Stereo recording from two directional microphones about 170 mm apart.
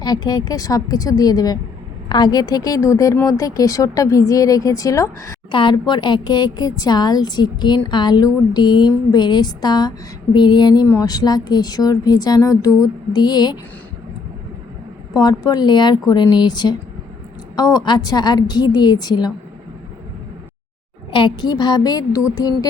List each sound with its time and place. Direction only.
0.0 s a woman's voice: 25° left (ahead or behind)
15.1 s a woman's voice: 25° left (ahead or behind)
21.1 s a woman's voice: 30° left (ahead or behind)